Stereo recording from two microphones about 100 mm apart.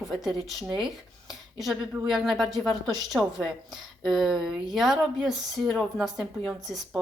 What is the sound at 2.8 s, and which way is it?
Speech, 45° right (ahead or behind).